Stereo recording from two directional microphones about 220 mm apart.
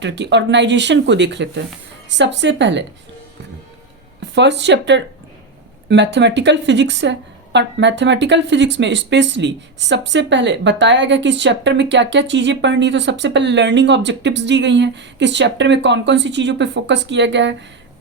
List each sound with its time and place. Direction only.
0.0 s speech: 55° right (ahead or behind)
4.2 s speech: 50° right (ahead or behind)